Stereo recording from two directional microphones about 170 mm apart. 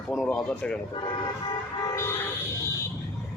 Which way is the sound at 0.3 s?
5° left (ahead or behind).